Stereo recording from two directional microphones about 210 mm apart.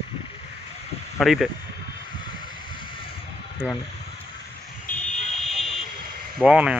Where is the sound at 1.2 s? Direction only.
Centre (ahead or behind).